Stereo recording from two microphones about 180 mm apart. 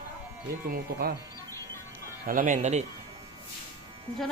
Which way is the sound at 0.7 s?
55° right (ahead or behind).